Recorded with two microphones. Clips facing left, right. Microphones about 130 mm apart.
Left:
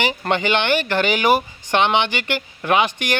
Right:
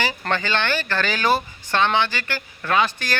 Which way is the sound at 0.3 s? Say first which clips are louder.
Left 5 dB; 20° left (ahead or behind).